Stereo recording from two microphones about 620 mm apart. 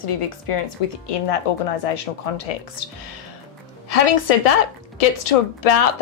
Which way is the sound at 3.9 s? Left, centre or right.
Left.